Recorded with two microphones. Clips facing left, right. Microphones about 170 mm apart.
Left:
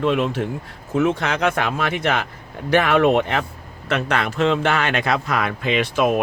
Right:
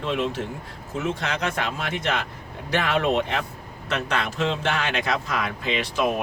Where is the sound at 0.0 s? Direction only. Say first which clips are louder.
Left 6 dB; 60° left (ahead or behind).